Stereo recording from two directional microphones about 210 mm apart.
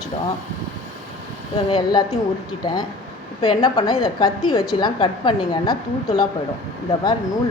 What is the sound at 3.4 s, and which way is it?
A woman's voice, 20° left (ahead or behind).